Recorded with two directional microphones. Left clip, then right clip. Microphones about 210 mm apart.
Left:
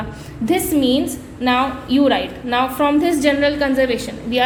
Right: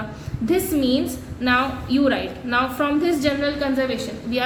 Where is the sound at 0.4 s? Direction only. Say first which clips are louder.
Left 4 dB; 15° left (ahead or behind).